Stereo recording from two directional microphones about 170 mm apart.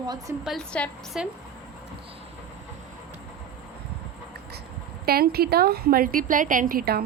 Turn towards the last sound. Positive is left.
turn(degrees=-65)  # may be behind; listen again after turning